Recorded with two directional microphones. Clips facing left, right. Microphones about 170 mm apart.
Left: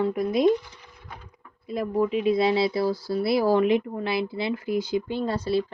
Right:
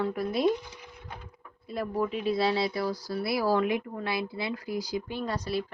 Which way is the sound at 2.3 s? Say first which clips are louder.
Left 5 dB; 25° left (ahead or behind).